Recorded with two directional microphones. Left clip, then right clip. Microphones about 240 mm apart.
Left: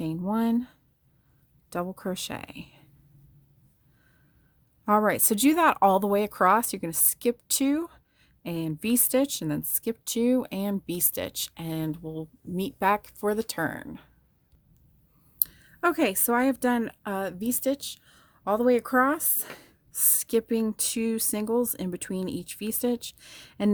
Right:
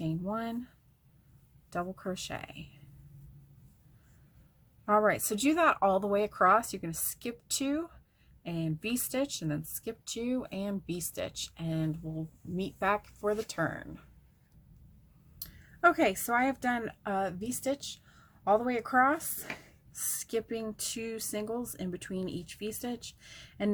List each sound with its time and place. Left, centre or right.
0.0 s a sound: left
1.7 s a woman's voice: left
4.9 s a woman's voice: left
15.4 s a woman's voice: left